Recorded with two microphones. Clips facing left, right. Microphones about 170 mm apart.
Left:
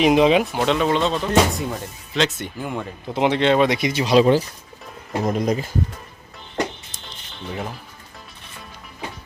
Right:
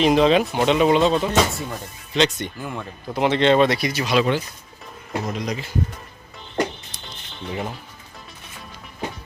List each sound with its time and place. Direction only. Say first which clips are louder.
0.0 s speech: left 1 dB; 10° left (ahead or behind)
0.6 s speech: right 3 dB; 5° right (ahead or behind)
3.1 s speech: left 1 dB; 20° left (ahead or behind)
3.3 s speech: right 2 dB; 5° left (ahead or behind)
3.8 s speech: left 2 dB; 20° left (ahead or behind)
4.0 s speech: left 6 dB; 35° left (ahead or behind)
5.2 s speech: left 9 dB; 50° left (ahead or behind)
7.4 s speech: right 1 dB; centre (ahead or behind)